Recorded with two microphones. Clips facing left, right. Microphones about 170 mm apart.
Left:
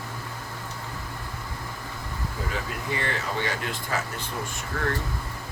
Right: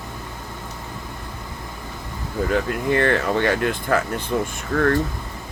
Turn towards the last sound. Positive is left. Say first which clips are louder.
# right 9 dB
turn(degrees=-60)  # may be behind; listen again after turning